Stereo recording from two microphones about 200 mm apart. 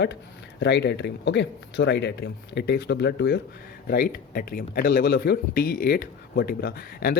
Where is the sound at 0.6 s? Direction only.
60° left (ahead or behind).